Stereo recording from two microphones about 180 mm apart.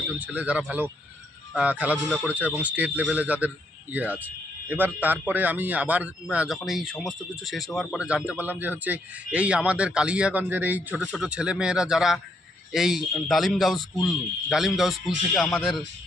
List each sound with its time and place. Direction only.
0.2 s a man's voice: 5° right (ahead or behind)